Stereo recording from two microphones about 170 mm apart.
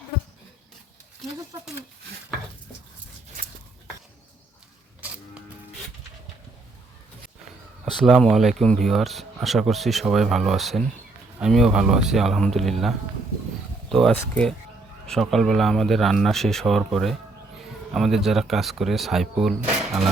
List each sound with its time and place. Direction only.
3.4 s a sound: 45° right (ahead or behind)
4.9 s music: 5° right (ahead or behind)
7.9 s speech: centre (ahead or behind)
13.9 s speech: 5° left (ahead or behind)